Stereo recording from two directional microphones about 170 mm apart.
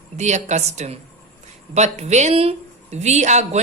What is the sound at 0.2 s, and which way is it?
A woman's voice, 45° right (ahead or behind).